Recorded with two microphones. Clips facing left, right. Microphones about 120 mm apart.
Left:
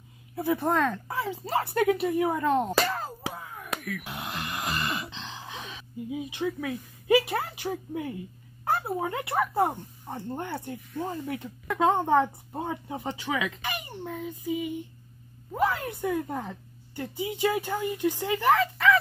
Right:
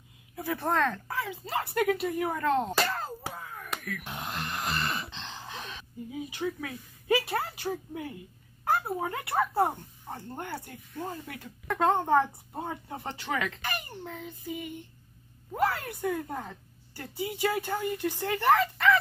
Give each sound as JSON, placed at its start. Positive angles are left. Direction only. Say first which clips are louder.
{"t": 0.4, "sound": "a child's voice", "louder": "left 3 dB", "side_deg": 15}
{"t": 1.0, "sound": "speech", "louder": "left 3 dB", "side_deg": 30}
{"t": 5.1, "sound": "gasp", "louder": "left 1 dB", "side_deg": 0}
{"t": 6.0, "sound": "a child's voice", "louder": "left 3 dB", "side_deg": 15}
{"t": 11.6, "sound": "a child's voice", "louder": "left 2 dB", "side_deg": 5}
{"t": 15.8, "sound": "a child's voice", "louder": "left 3 dB", "side_deg": 20}
{"t": 18.4, "sound": "speech", "louder": "left 1 dB", "side_deg": 0}